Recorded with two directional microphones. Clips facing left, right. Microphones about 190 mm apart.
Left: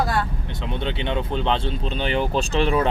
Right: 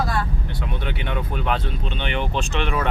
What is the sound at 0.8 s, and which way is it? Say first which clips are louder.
Speech: left 5 dB; 25° left (ahead or behind).